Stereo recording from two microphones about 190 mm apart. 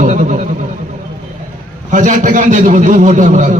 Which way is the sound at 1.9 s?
40° right (ahead or behind).